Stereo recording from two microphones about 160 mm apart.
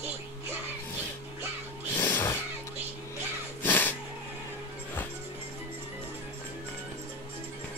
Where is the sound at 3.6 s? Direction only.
10° left (ahead or behind).